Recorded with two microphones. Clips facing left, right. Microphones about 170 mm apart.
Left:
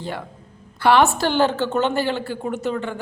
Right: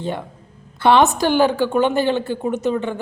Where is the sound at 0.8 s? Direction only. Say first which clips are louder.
Right 2 dB; 20° right (ahead or behind).